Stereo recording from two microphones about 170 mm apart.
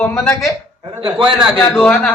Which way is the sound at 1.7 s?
5° left (ahead or behind).